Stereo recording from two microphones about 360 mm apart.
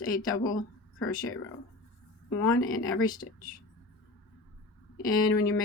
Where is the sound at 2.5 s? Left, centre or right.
Left.